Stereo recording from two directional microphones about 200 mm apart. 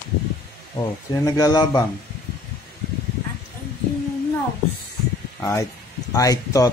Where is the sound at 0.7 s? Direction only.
20° left (ahead or behind).